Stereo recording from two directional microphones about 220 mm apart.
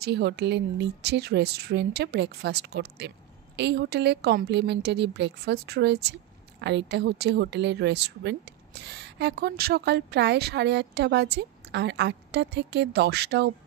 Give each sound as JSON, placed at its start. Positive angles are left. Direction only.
{"t": 0.0, "sound": "speech", "side_deg": -50}